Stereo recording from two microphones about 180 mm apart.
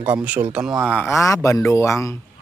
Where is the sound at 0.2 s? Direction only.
10° right (ahead or behind).